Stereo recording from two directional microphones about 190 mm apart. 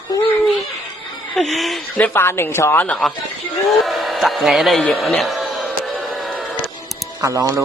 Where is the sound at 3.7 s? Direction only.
Centre (ahead or behind).